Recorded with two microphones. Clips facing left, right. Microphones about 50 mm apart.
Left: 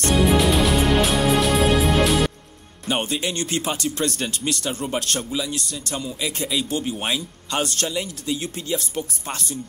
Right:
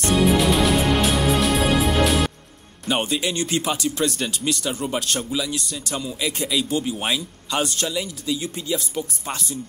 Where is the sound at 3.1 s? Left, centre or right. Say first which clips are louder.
Right 1 dB; left.